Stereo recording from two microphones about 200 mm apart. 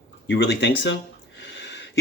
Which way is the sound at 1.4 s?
60° left (ahead or behind).